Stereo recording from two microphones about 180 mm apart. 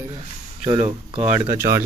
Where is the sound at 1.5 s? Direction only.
15° right (ahead or behind).